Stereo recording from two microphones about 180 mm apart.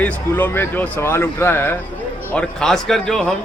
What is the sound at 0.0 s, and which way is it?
Speech, 10° left (ahead or behind).